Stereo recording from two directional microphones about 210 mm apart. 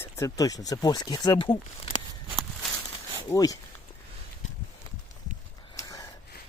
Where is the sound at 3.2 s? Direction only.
15° left (ahead or behind).